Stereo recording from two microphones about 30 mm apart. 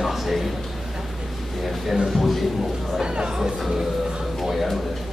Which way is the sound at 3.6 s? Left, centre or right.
Centre.